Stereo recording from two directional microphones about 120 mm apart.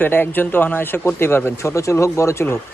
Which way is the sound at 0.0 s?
15° left (ahead or behind).